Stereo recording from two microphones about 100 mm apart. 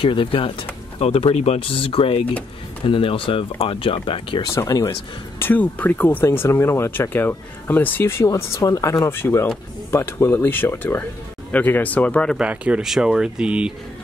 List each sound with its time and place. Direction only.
0.0 s speech: 60° left (ahead or behind)
0.9 s speech: 85° left; by 4.4 s 60° left (ahead or behind)
4.4 s speech: 35° left (ahead or behind)
5.4 s speech: 15° left (ahead or behind)
12.4 s speech: 10° right (ahead or behind)